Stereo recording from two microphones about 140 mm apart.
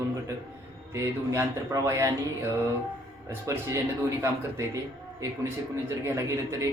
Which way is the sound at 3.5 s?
20° right (ahead or behind).